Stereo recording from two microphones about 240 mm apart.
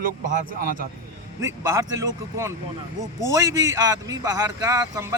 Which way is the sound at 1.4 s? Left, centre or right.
Centre.